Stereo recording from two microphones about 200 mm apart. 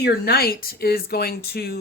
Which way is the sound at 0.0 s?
50° left (ahead or behind).